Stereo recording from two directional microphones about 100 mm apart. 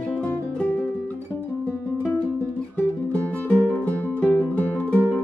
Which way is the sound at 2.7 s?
15° left (ahead or behind).